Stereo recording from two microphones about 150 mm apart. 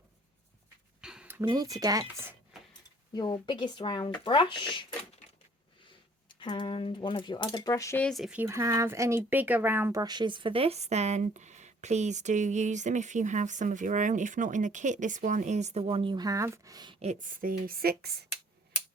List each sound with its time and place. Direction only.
1.0 s a sound: 5° right (ahead or behind)
1.5 s speech: 25° right (ahead or behind)
3.1 s speech: 25° left (ahead or behind)
6.2 s speech: 30° left (ahead or behind)
8.0 s speech: centre (ahead or behind)
8.4 s speech: 20° right (ahead or behind)
10.0 s speech: 30° right (ahead or behind)
17.0 s a woman's voice: 55° right (ahead or behind); by 18.1 s 85° right